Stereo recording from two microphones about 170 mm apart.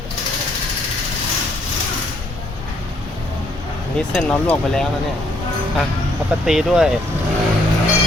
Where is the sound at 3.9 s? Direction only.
5° left (ahead or behind).